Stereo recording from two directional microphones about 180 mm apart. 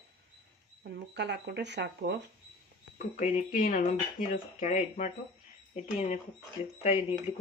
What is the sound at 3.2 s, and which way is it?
Speech, 45° left (ahead or behind).